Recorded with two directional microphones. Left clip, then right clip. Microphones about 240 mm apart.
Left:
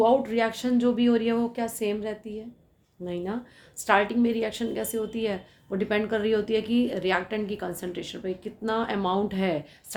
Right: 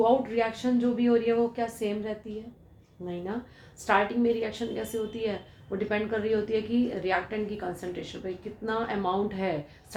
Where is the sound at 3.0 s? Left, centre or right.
Left.